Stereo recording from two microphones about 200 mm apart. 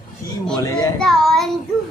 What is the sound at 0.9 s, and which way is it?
Child singing, centre (ahead or behind).